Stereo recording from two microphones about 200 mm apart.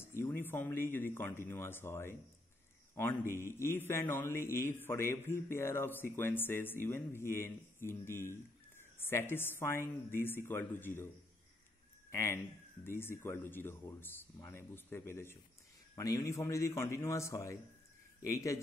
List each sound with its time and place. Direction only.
0.0 s a man's voice: 10° left (ahead or behind)
12.1 s a man's voice: 15° left (ahead or behind)